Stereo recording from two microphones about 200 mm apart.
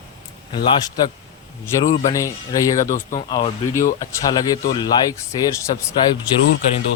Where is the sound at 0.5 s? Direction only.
25° left (ahead or behind).